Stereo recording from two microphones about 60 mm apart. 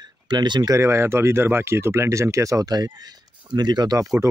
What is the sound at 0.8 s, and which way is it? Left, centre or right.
Speech, right.